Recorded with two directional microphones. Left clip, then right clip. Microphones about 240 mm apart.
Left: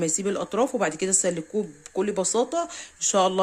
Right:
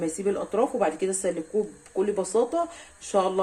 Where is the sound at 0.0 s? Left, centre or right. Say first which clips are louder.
Left 1 dB; left.